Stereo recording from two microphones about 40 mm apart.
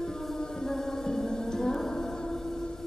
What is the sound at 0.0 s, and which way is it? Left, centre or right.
Music, centre.